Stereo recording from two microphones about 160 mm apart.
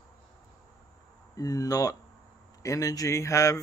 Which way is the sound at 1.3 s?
20° left (ahead or behind).